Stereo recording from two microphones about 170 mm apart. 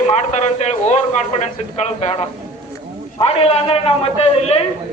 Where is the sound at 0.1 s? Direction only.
40° left (ahead or behind).